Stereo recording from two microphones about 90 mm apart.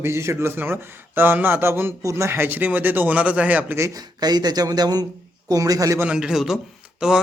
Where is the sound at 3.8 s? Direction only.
45° right (ahead or behind).